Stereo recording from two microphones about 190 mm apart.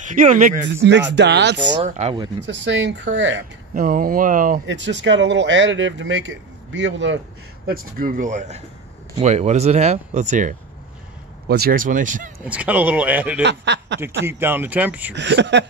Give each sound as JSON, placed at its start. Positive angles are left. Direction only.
{"t": 0.0, "sound": "speech", "side_deg": -45}
{"t": 1.1, "sound": "speech", "side_deg": -65}
{"t": 1.8, "sound": "speech", "side_deg": -35}
{"t": 2.4, "sound": "speech", "side_deg": -70}
{"t": 3.7, "sound": "speech", "side_deg": -45}
{"t": 4.6, "sound": "speech", "side_deg": -70}
{"t": 7.6, "sound": "speech", "side_deg": -50}
{"t": 11.4, "sound": "speech", "side_deg": -55}
{"t": 12.4, "sound": "speech", "side_deg": -5}
{"t": 13.4, "sound": "speech", "side_deg": -65}
{"t": 14.2, "sound": "speech", "side_deg": -10}
{"t": 15.1, "sound": "speech", "side_deg": -65}